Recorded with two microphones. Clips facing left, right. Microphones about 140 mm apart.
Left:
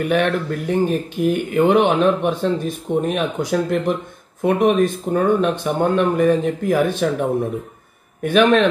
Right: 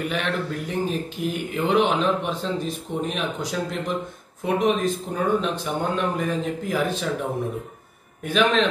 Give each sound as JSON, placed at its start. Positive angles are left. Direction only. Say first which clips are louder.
{"t": 0.0, "sound": "speech", "louder": "left 8 dB", "side_deg": 55}